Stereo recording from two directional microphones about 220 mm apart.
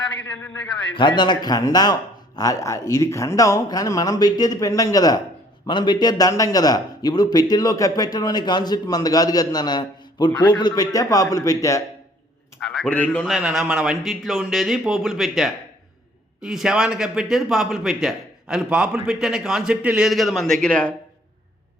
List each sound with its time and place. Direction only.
0.4 s speech: 5° left (ahead or behind)
0.9 s a man's voice: 20° left (ahead or behind)
12.5 s speech: centre (ahead or behind)